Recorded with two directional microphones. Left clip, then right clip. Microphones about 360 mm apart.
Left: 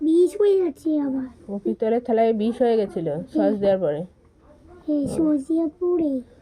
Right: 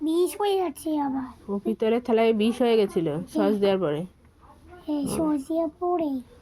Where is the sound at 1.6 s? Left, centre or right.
Right.